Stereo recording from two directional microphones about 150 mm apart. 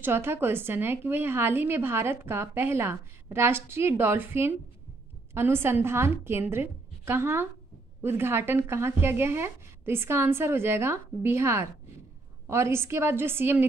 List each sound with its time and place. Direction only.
0.0 s a woman's voice: 15° right (ahead or behind)